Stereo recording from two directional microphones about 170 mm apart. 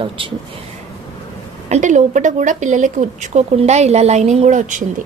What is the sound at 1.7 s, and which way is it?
Speech, 45° right (ahead or behind).